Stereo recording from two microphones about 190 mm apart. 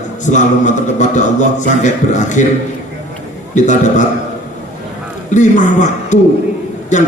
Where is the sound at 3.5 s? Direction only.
40° left (ahead or behind).